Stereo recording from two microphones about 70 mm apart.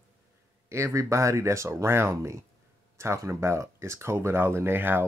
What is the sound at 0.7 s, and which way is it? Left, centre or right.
Speech, right.